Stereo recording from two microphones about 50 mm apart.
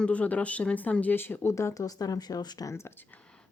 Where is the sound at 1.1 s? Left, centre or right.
Left.